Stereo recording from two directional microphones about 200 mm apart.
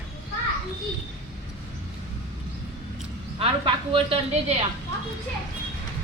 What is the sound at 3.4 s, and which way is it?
Speech, 25° right (ahead or behind).